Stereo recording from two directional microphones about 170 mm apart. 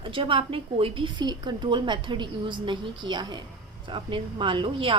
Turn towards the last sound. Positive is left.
turn(degrees=-30)  # may be behind; listen again after turning